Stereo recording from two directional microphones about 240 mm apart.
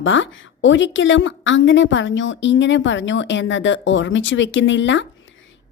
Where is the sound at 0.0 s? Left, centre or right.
Left.